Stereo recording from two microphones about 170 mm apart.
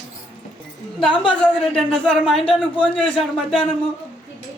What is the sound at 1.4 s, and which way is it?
Speech, 5° left (ahead or behind).